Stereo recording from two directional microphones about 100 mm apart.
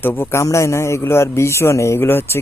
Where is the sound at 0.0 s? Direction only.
25° left (ahead or behind).